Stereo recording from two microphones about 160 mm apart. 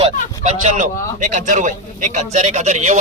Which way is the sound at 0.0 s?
45° right (ahead or behind).